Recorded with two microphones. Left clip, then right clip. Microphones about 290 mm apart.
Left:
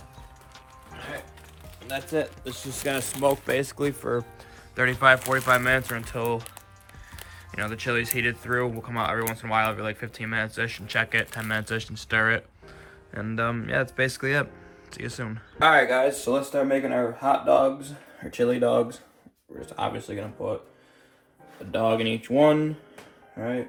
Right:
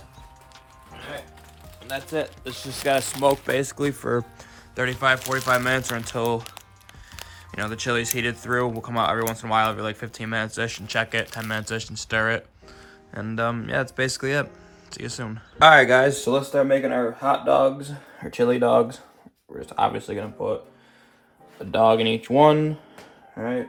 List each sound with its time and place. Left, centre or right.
0.9 s music: centre
1.8 s speech: centre
2.6 s speech: right
4.7 s speech: centre
15.5 s speech: right
21.7 s speech: right